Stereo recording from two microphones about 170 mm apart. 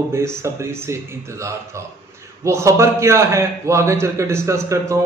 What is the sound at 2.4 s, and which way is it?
A man's voice, 15° right (ahead or behind).